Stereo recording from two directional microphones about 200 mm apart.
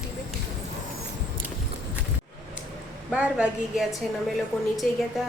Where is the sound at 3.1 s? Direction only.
5° right (ahead or behind).